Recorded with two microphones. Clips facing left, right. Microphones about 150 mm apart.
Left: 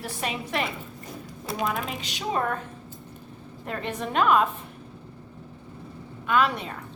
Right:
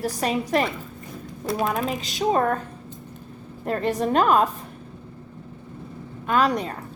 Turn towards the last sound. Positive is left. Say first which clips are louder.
# right 3 dB
turn(degrees=-40)  # may be behind; listen again after turning